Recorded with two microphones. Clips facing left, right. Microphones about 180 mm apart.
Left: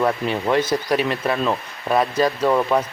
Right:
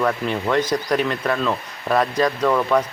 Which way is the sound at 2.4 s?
20° left (ahead or behind).